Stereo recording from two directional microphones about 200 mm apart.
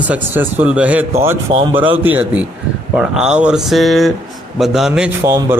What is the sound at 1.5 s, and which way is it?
Speech, 30° right (ahead or behind).